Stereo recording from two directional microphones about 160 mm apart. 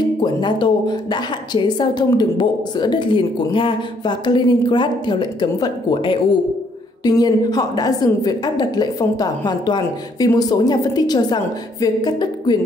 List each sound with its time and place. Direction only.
0.2 s a woman's voice: 30° left (ahead or behind)